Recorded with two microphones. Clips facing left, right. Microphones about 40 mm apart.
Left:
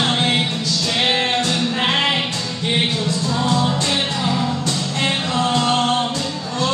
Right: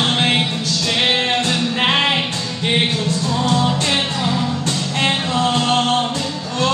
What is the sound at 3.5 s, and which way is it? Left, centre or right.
Music, right.